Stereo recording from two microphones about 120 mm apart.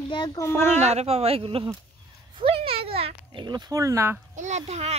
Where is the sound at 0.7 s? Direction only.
65° right (ahead or behind); by 1.7 s 50° right (ahead or behind).